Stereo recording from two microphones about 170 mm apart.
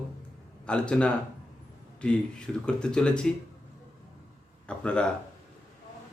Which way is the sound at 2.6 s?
5° left (ahead or behind).